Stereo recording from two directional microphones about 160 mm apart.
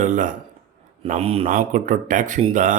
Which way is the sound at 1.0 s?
40° right (ahead or behind).